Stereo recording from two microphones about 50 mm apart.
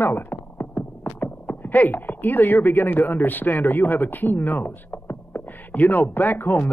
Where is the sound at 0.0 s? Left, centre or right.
Left.